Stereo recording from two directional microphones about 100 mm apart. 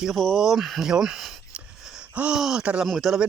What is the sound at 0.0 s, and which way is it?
Speech, centre (ahead or behind).